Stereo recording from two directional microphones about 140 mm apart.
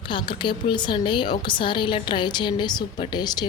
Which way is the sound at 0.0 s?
35° left (ahead or behind).